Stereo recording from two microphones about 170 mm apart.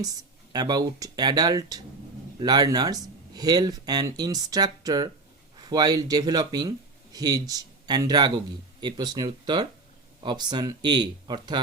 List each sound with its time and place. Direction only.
0.0 s speech: 25° right (ahead or behind)